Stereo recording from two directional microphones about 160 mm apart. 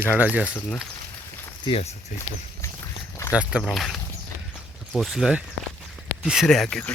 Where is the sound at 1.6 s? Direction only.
40° left (ahead or behind).